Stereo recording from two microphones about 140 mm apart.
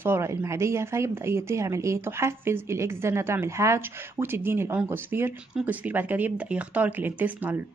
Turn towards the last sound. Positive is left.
turn(degrees=-15)  # may be behind; listen again after turning